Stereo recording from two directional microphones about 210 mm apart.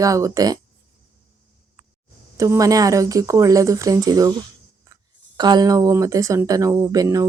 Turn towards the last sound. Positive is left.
turn(degrees=-15)  # may be behind; listen again after turning